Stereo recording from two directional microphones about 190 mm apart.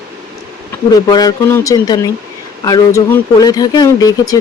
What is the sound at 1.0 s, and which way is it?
Speech, 20° left (ahead or behind).